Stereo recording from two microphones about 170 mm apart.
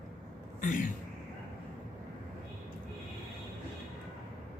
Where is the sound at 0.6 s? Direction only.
50° left (ahead or behind).